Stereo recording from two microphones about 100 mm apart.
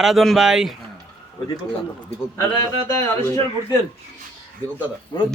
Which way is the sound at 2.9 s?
25° left (ahead or behind).